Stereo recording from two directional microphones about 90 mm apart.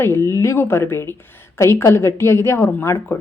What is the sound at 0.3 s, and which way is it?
Speech, 35° left (ahead or behind).